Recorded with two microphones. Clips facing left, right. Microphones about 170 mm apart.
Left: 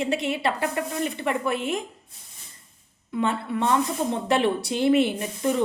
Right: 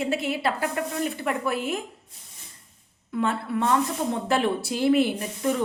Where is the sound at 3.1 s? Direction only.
Centre (ahead or behind).